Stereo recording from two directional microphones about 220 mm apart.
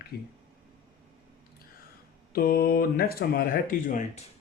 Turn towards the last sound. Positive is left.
turn(degrees=35)  # may be behind; listen again after turning